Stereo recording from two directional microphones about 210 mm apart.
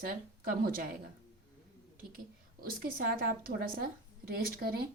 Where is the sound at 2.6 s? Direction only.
45° right (ahead or behind).